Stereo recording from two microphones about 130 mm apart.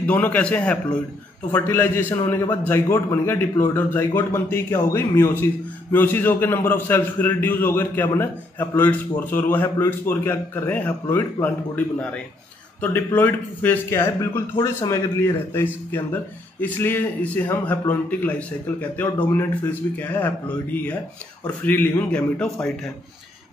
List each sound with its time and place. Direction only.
0.0 s speech: 10° left (ahead or behind)